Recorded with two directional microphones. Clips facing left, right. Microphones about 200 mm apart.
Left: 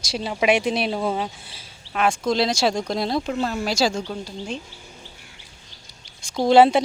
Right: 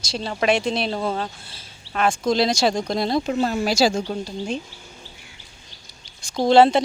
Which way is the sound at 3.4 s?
15° right (ahead or behind).